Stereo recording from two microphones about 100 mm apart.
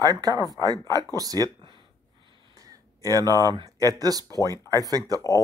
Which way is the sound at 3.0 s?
35° right (ahead or behind).